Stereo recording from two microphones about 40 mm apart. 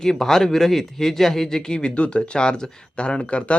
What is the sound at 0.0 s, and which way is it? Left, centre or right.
Speech, centre.